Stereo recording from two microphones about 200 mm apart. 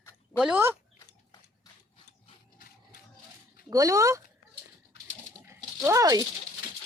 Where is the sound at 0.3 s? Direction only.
5° right (ahead or behind).